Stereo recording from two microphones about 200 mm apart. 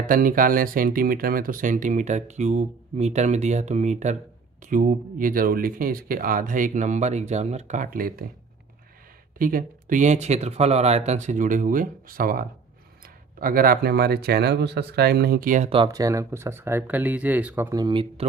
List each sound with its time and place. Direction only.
0.0 s speech: 45° right (ahead or behind)
9.4 s speech: 45° right (ahead or behind)
15.7 s speech: 20° right (ahead or behind)